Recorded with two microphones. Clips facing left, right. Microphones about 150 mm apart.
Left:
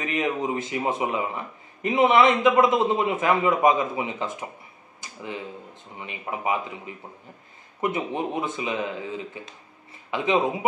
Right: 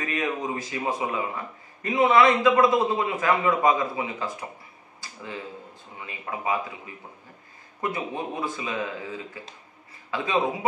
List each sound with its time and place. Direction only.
0.0 s speech: 20° left (ahead or behind)
7.8 s speech: 20° left (ahead or behind)